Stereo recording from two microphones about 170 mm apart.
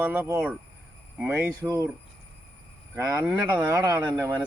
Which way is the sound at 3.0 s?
20° right (ahead or behind).